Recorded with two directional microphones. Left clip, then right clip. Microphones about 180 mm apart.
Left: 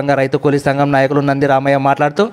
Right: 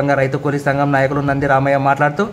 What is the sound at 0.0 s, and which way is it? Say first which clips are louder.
A man's voice: left 2 dB; 30° left (ahead or behind).